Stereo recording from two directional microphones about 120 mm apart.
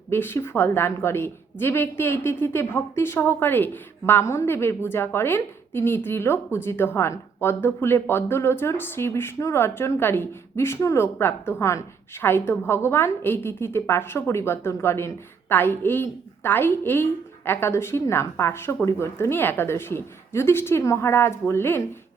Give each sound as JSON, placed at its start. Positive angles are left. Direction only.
{"t": 0.1, "sound": "a woman's voice", "side_deg": 20}